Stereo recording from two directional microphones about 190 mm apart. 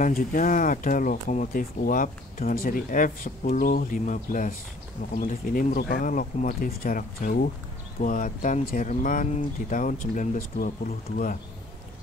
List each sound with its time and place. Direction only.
0.0 s speech: 45° left (ahead or behind)